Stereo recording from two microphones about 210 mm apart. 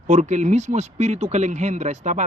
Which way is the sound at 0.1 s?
35° right (ahead or behind).